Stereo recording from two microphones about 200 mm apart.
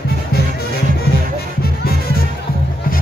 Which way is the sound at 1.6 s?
50° left (ahead or behind).